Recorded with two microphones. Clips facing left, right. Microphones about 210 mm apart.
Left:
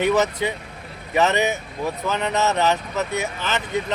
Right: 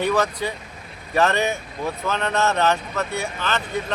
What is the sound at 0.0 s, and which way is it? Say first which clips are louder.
Speech: left 2 dB; 20° left (ahead or behind).